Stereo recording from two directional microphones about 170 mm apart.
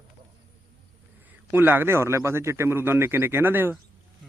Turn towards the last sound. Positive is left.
turn(degrees=-10)  # may be behind; listen again after turning